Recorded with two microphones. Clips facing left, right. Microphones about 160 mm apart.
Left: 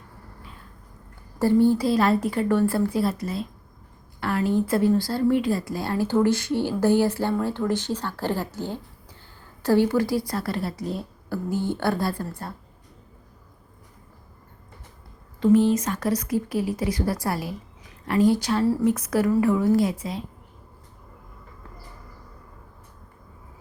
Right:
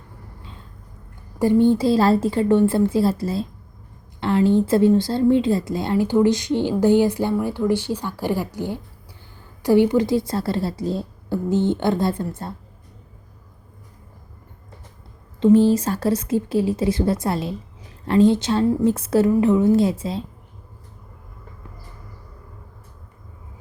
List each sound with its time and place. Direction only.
1.4 s a woman's voice: 20° right (ahead or behind)
15.4 s a woman's voice: 30° right (ahead or behind)